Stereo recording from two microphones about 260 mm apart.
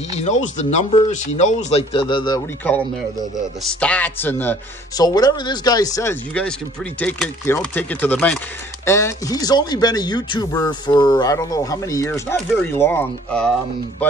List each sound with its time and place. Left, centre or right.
0.2 s speech: left; by 2.8 s centre
3.8 s speech: centre